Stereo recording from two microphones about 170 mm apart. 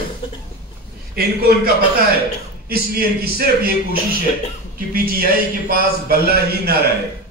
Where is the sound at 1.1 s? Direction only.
65° right (ahead or behind).